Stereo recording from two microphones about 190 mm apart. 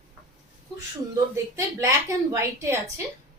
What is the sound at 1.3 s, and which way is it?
A woman's voice, 15° right (ahead or behind).